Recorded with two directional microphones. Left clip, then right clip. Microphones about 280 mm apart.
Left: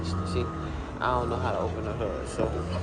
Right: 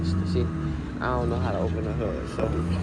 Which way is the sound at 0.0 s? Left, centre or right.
Left.